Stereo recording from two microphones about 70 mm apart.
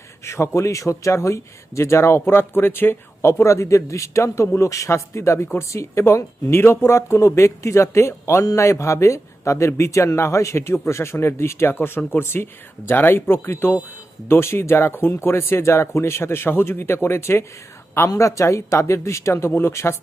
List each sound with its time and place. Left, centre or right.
0.3 s speech: left
18.1 s speech: left